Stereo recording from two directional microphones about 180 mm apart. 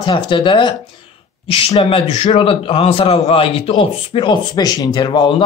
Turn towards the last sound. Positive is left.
turn(degrees=25)  # may be behind; listen again after turning